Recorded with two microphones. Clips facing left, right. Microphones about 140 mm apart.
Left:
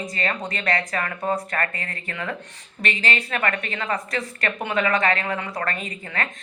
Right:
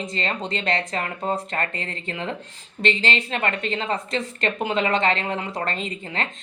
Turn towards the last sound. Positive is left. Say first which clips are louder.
# right 1 dB
turn(degrees=-25)  # may be behind; listen again after turning